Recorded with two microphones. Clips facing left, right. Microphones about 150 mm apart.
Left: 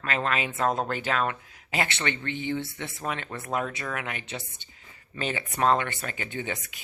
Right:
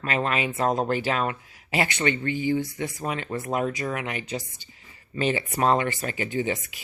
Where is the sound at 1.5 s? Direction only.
45° left (ahead or behind).